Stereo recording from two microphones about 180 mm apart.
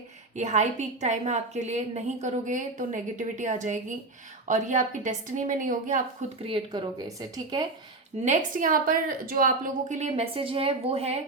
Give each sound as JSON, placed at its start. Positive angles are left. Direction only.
{"t": 0.3, "sound": "a woman's voice", "side_deg": -40}
{"t": 6.4, "sound": "a woman's voice", "side_deg": -30}
{"t": 7.2, "sound": "speech", "side_deg": -20}
{"t": 8.2, "sound": "a woman's voice", "side_deg": -45}